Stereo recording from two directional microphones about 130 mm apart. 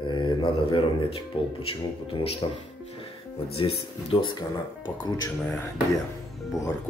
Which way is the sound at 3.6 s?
40° left (ahead or behind).